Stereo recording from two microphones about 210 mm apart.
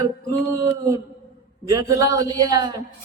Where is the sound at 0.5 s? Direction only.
15° right (ahead or behind).